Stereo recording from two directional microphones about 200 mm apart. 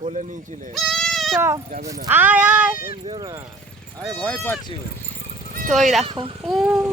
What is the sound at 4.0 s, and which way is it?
Speech, 5° left (ahead or behind).